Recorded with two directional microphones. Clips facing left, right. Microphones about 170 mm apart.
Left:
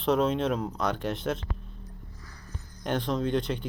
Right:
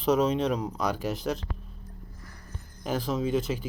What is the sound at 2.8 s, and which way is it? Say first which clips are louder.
Speech: even; 5° right (ahead or behind).